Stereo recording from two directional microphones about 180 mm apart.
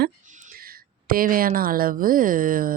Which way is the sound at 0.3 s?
45° right (ahead or behind).